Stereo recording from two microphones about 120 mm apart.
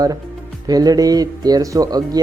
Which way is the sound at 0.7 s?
30° right (ahead or behind).